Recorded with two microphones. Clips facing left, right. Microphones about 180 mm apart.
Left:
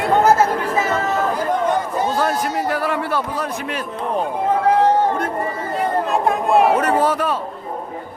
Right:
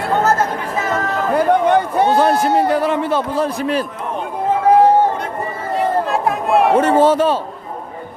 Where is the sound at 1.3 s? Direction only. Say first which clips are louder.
Right 6 dB; 65° right (ahead or behind).